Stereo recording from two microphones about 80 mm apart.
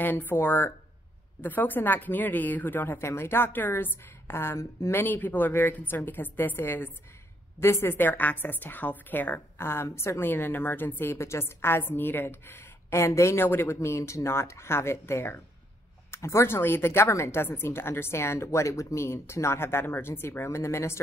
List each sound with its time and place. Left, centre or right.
0.0 s a woman's voice: left